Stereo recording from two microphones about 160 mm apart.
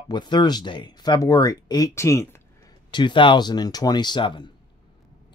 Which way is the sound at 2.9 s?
30° left (ahead or behind).